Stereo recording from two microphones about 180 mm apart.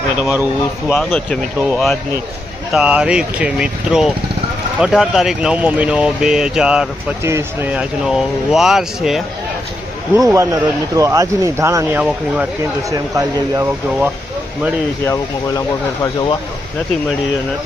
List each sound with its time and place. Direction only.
0.2 s speech: 10° right (ahead or behind)
0.9 s speech: 5° left (ahead or behind)
10.2 s speech: 15° right (ahead or behind)
15.0 s speech: 20° left (ahead or behind)